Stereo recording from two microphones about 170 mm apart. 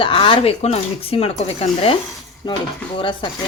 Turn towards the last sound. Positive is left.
turn(degrees=30)  # may be behind; listen again after turning